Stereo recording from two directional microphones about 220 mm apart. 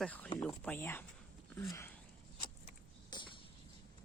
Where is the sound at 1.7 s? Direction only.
10° left (ahead or behind).